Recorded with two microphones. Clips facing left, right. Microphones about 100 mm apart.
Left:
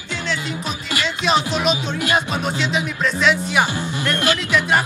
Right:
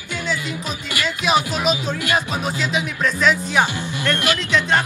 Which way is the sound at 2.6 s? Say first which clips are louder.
Even; centre (ahead or behind).